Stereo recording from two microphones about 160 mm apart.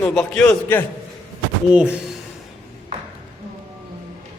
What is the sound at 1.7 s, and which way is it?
Speech, 5° right (ahead or behind).